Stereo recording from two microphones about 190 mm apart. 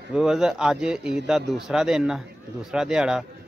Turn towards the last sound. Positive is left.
turn(degrees=-5)  # may be behind; listen again after turning